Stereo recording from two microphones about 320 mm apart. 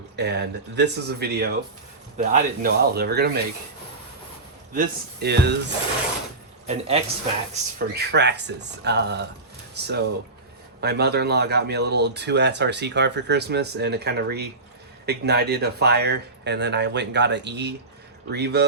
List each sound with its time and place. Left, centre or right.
0.2 s speech: right
4.7 s speech: right
6.7 s speech: centre
7.5 s speech: right